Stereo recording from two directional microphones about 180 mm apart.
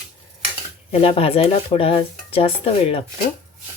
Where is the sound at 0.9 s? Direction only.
35° left (ahead or behind).